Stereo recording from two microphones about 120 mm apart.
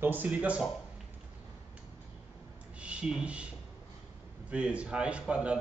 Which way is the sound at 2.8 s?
5° right (ahead or behind).